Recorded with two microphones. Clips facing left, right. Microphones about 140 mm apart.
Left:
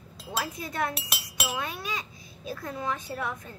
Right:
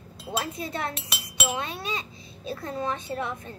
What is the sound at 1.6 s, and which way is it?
A child's voice, 25° right (ahead or behind).